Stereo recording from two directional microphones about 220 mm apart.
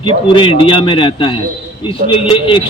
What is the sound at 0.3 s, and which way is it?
Speech, 25° left (ahead or behind).